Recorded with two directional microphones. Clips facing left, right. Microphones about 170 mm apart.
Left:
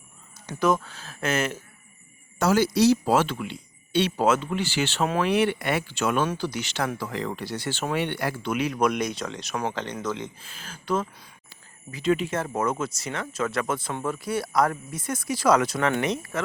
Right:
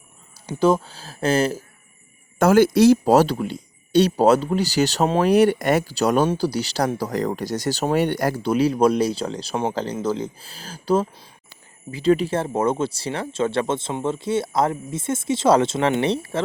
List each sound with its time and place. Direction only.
0.4 s speech: 30° right (ahead or behind)
2.4 s speech: 50° right (ahead or behind); by 16.4 s 30° right (ahead or behind)